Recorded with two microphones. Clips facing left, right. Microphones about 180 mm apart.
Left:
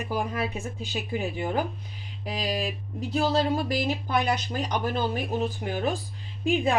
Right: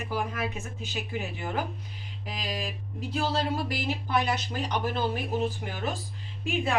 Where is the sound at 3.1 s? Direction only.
20° left (ahead or behind).